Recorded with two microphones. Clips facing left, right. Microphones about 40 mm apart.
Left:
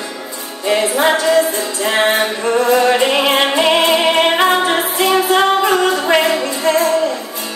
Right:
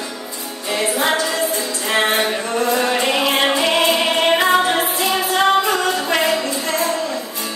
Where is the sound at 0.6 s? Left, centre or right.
Left.